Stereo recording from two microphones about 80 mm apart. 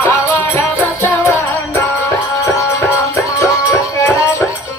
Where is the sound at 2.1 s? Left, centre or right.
Left.